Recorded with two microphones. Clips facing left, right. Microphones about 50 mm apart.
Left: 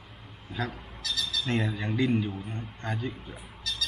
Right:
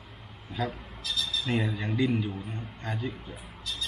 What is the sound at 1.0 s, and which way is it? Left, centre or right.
Squawk, left.